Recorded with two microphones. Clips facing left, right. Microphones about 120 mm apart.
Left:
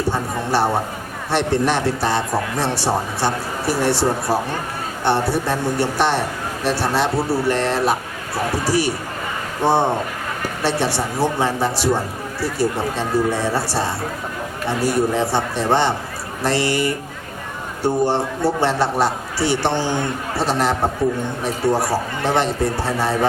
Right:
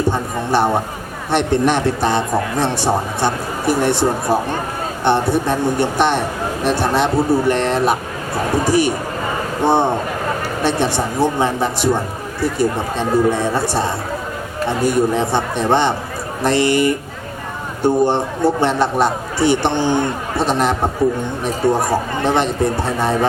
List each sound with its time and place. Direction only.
0.1 s a man's voice: 20° right (ahead or behind)
10.6 s a man's voice: 20° right (ahead or behind)
21.6 s speech: 50° right (ahead or behind)
22.2 s a man's voice: 20° right (ahead or behind)